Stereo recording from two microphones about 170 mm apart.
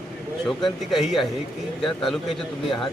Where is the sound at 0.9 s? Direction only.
Centre (ahead or behind).